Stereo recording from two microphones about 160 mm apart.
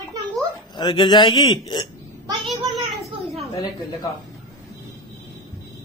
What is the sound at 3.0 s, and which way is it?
Speech, centre (ahead or behind).